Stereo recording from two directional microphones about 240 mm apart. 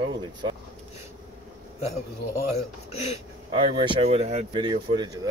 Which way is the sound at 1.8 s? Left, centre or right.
Left.